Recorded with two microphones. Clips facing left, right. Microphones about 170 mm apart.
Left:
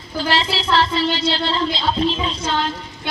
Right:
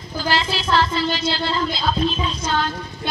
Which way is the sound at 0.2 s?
30° left (ahead or behind).